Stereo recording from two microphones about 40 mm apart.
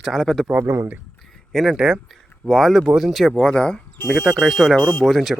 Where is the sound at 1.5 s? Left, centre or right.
Centre.